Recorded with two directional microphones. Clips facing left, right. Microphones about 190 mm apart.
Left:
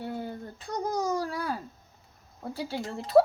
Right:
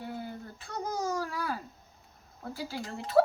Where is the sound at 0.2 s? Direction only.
35° left (ahead or behind).